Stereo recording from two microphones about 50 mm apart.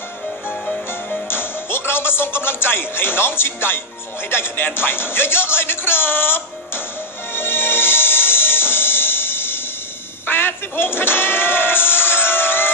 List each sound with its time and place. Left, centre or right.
1.3 s speech: left
7.3 s music: left